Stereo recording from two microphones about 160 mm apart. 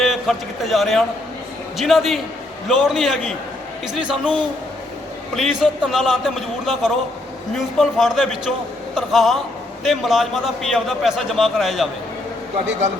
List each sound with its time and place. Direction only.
0.0 s a man's voice: centre (ahead or behind)